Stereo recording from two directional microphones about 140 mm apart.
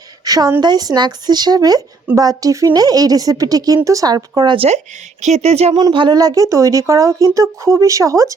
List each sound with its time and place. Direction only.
0.3 s a woman's voice: 25° right (ahead or behind); by 4.8 s 40° right (ahead or behind)
5.2 s speech: 50° right (ahead or behind)
5.7 s speech: 35° right (ahead or behind)